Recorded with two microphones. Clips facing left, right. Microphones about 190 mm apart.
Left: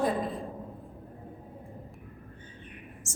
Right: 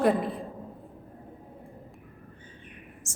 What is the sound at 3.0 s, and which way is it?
Speech, 55° left (ahead or behind).